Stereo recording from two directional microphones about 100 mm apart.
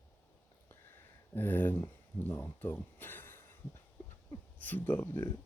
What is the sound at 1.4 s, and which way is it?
Speech, 20° left (ahead or behind).